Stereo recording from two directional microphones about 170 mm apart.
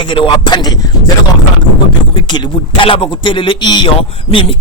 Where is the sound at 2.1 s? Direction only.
25° left (ahead or behind).